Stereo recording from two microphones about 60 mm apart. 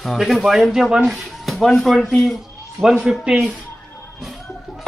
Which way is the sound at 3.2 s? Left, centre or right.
Centre.